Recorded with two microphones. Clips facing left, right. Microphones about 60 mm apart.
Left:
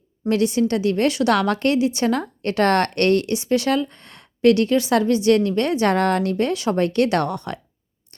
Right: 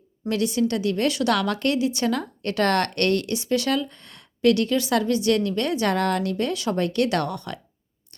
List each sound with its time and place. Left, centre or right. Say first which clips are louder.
0.3 s a woman's voice: left 4 dB; left